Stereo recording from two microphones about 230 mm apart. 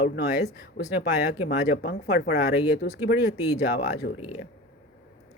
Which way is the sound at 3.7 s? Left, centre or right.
Left.